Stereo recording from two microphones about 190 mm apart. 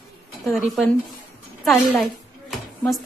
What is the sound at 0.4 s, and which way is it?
Speech, centre (ahead or behind).